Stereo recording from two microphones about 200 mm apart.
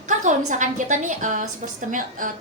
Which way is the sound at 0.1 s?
40° right (ahead or behind).